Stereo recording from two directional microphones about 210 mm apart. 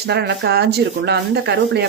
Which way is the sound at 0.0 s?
50° right (ahead or behind).